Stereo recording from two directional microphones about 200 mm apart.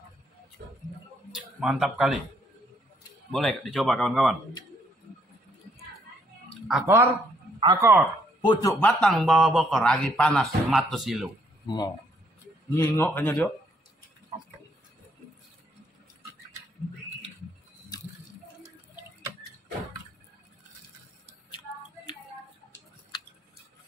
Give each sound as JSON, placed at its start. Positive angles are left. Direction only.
{"t": 0.6, "sound": "a sound", "side_deg": -50}
{"t": 1.3, "sound": "speech", "side_deg": -5}
{"t": 3.3, "sound": "a man's voice", "side_deg": 0}
{"t": 6.7, "sound": "speech", "side_deg": -10}
{"t": 8.4, "sound": "a man's voice", "side_deg": 25}
{"t": 8.7, "sound": "a man's voice", "side_deg": 5}
{"t": 11.6, "sound": "speech", "side_deg": 20}
{"t": 12.9, "sound": "speech", "side_deg": 10}
{"t": 21.5, "sound": "music", "side_deg": 25}